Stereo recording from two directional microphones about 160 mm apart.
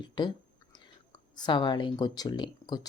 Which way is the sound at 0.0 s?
30° left (ahead or behind).